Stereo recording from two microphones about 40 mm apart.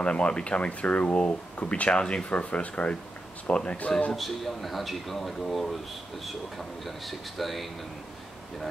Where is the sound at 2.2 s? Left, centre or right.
Left.